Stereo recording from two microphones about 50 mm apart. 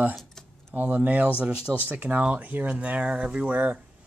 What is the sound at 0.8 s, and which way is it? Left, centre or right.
Speech, right.